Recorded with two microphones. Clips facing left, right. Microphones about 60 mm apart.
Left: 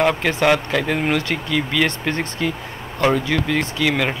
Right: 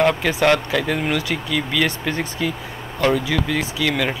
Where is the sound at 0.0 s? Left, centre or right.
Centre.